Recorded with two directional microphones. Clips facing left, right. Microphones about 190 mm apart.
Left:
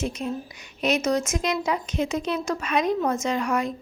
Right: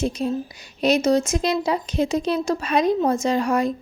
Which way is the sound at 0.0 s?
35° right (ahead or behind).